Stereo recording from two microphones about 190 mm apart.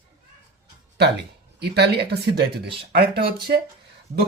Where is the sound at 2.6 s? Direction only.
25° right (ahead or behind).